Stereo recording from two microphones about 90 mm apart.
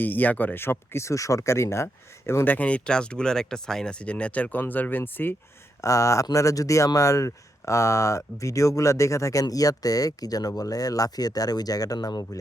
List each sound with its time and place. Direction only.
0.0 s speech: 20° left (ahead or behind)
5.8 s speech: 35° left (ahead or behind)